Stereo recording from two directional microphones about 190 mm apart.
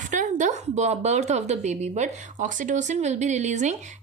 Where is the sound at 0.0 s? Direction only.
40° right (ahead or behind).